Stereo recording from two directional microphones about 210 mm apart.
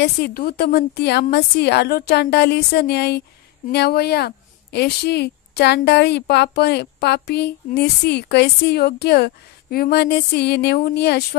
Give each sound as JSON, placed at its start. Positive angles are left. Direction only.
{"t": 0.0, "sound": "speech", "side_deg": 45}